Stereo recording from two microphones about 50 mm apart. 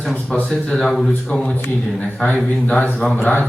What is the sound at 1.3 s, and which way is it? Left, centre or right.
Speech, centre.